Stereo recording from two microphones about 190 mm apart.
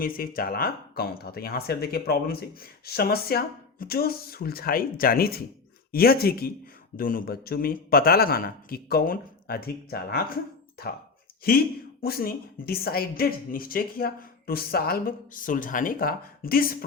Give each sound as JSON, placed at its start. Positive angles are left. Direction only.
{"t": 0.0, "sound": "speech", "side_deg": 50}
{"t": 11.4, "sound": "speech", "side_deg": 55}